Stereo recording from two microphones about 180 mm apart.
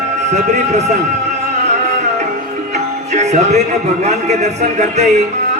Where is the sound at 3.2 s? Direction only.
40° right (ahead or behind).